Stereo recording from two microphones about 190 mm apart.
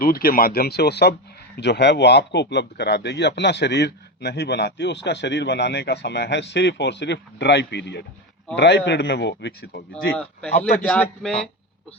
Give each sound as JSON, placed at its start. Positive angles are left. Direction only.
{"t": 0.0, "sound": "speech", "side_deg": 50}
{"t": 10.1, "sound": "speech", "side_deg": 5}